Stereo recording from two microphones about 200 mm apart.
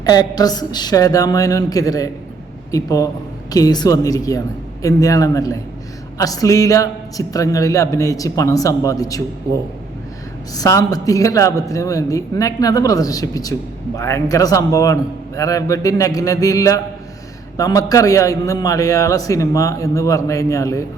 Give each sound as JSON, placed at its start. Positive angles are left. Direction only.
{"t": 0.0, "sound": "speech", "side_deg": 20}
{"t": 10.5, "sound": "speech", "side_deg": 15}